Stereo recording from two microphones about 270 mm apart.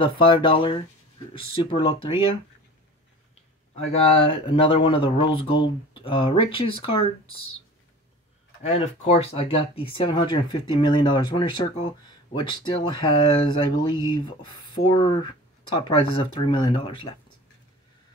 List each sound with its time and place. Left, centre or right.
0.0 s speech: centre
3.7 s speech: left
8.6 s speech: left